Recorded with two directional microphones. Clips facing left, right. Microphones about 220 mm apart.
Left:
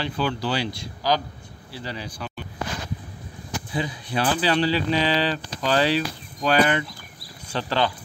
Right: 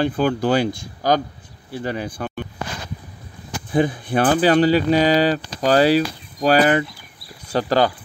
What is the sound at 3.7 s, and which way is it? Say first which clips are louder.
Speech: right 11 dB; 50° right (ahead or behind).